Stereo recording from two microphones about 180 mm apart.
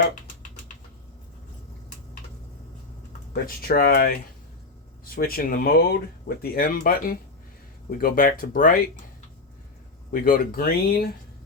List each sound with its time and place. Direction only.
3.3 s speech: 55° left (ahead or behind)
10.1 s speech: 50° left (ahead or behind)